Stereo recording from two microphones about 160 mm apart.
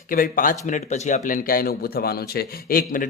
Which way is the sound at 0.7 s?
50° left (ahead or behind).